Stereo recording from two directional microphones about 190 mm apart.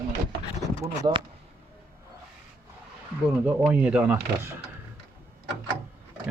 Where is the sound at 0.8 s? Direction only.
25° right (ahead or behind).